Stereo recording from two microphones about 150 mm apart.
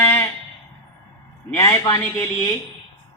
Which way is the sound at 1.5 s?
20° left (ahead or behind).